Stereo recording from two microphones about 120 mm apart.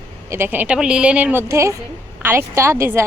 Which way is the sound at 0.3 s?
20° right (ahead or behind).